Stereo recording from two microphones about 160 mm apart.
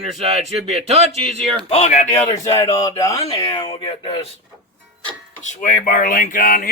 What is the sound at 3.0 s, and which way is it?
Speech, 20° left (ahead or behind).